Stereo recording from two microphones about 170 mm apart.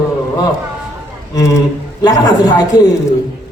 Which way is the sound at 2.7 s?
25° left (ahead or behind).